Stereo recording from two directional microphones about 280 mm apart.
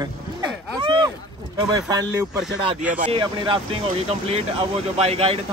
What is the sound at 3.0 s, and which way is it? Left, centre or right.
Speech, centre.